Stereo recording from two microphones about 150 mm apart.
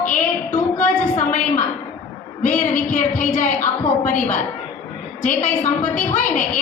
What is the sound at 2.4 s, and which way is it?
A woman's voice, 55° left (ahead or behind).